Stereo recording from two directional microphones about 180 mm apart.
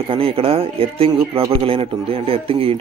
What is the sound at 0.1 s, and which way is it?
Speech, 30° right (ahead or behind).